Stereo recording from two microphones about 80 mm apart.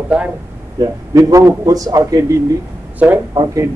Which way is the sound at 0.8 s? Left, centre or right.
Right.